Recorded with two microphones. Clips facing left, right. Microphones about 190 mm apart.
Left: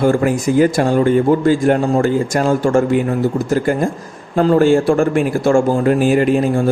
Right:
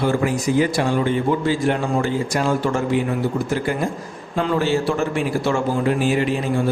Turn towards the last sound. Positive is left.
turn(degrees=50)  # may be behind; listen again after turning